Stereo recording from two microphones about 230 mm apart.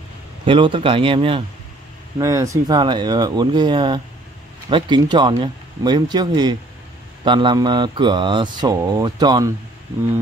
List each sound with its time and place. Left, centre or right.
0.5 s speech: right